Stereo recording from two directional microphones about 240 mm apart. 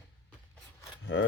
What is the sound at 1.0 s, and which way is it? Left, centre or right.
Speech, left.